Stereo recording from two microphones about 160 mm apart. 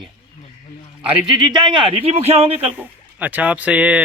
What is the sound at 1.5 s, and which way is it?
A man's voice, 30° right (ahead or behind).